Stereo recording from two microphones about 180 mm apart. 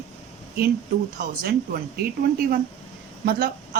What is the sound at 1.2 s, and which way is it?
Speech, 55° right (ahead or behind).